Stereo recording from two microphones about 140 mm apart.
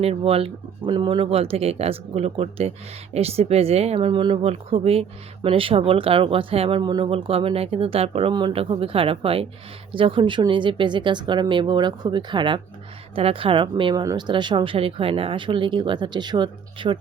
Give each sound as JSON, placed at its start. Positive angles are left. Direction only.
{"t": 0.0, "sound": "speech", "side_deg": -45}
{"t": 8.3, "sound": "speech", "side_deg": -35}